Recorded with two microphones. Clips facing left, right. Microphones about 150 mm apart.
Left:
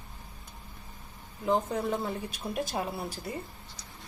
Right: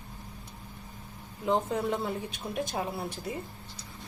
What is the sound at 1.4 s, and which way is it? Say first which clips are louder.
A woman's voice: even; centre (ahead or behind).